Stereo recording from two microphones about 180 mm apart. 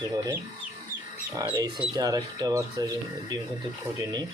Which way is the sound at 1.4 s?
20° right (ahead or behind).